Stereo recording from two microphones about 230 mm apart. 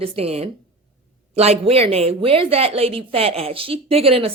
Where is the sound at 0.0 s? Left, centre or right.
Right.